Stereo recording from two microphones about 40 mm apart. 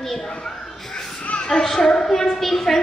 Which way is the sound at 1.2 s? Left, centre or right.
Left.